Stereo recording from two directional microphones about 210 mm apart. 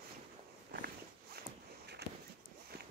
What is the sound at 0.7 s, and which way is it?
Walk, 50° right (ahead or behind).